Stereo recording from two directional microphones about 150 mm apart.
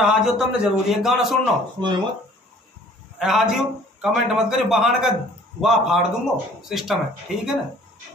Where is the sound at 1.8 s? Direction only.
30° right (ahead or behind).